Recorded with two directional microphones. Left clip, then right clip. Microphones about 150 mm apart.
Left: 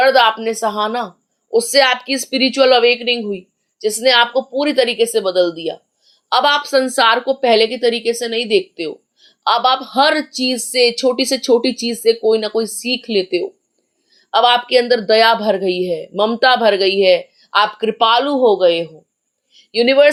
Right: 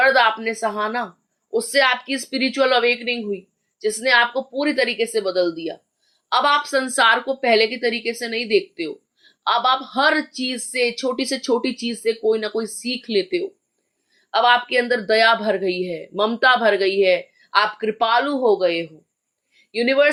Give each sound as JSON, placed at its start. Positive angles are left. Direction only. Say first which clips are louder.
{"t": 0.0, "sound": "a woman's voice", "louder": "left 4 dB", "side_deg": 35}